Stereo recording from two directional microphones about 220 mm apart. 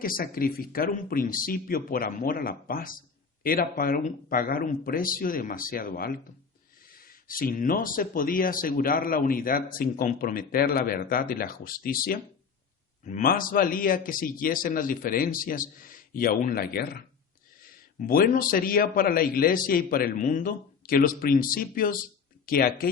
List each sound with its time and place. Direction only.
0.0 s speech: 40° left (ahead or behind)